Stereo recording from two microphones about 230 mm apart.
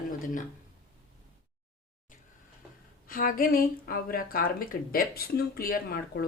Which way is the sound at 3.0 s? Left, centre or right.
Left.